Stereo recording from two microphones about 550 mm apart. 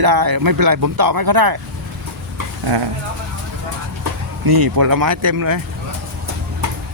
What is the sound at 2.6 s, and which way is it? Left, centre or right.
Speech, right.